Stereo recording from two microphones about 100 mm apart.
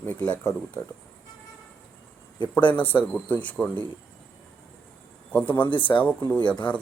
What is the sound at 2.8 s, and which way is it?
Speech, 15° left (ahead or behind).